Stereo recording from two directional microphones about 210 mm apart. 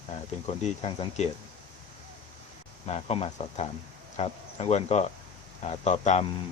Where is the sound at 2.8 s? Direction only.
30° left (ahead or behind).